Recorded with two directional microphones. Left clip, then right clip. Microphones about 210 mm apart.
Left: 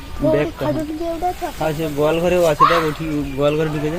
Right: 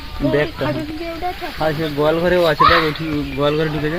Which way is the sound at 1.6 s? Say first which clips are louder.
Right 2 dB; 20° right (ahead or behind).